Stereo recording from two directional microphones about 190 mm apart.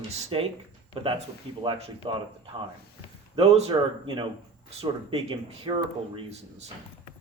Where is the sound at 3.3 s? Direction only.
30° right (ahead or behind).